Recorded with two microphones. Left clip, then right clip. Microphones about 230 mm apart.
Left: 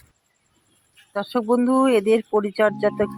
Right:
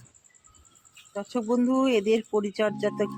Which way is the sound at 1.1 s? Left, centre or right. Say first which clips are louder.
Left 7 dB; centre.